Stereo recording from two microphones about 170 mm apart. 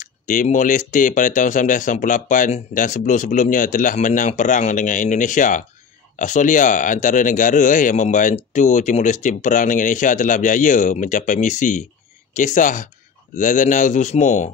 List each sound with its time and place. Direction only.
0.0 s speech: 50° left (ahead or behind)